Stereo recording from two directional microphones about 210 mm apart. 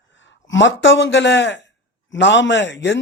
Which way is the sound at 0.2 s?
60° left (ahead or behind).